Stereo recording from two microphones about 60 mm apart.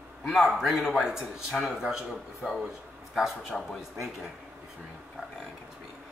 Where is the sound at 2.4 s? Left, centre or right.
Centre.